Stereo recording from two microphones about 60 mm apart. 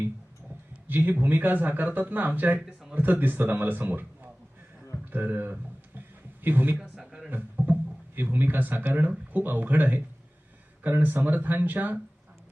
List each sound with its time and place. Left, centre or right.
0.9 s a man's voice: right
2.6 s speech: centre
2.9 s a man's voice: right
6.0 s a sound: right
6.8 s a sound: centre
7.3 s speech: right